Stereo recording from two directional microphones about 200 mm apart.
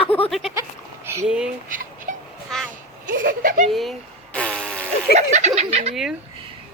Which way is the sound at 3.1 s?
45° right (ahead or behind).